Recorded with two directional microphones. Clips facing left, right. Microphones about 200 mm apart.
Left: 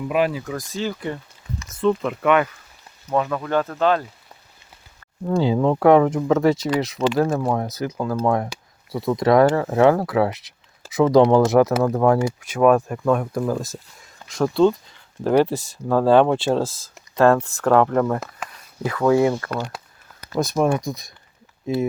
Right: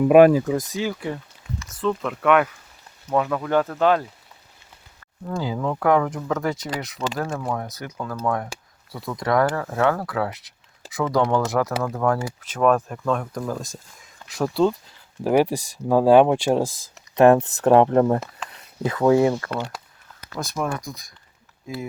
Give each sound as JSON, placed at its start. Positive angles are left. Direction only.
{"t": 0.0, "sound": "speech", "side_deg": -50}
{"t": 0.4, "sound": "speech", "side_deg": -25}
{"t": 0.8, "sound": "speech", "side_deg": -10}
{"t": 1.8, "sound": "speech", "side_deg": 5}
{"t": 5.2, "sound": "speech", "side_deg": 30}
{"t": 7.3, "sound": "speech", "side_deg": 35}
{"t": 12.5, "sound": "speech", "side_deg": 10}
{"t": 14.0, "sound": "speech", "side_deg": -5}
{"t": 20.4, "sound": "speech", "side_deg": 20}